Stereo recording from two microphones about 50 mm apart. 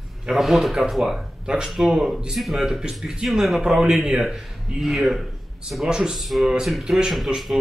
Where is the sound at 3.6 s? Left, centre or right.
Centre.